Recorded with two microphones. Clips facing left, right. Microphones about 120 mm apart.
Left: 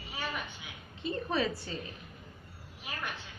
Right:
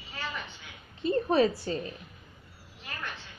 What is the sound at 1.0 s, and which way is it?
Speech, 40° right (ahead or behind).